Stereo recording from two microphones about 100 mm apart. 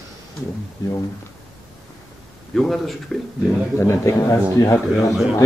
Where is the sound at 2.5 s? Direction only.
Centre (ahead or behind).